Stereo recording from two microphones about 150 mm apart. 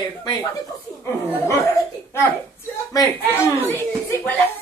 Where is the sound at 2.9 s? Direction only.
25° left (ahead or behind).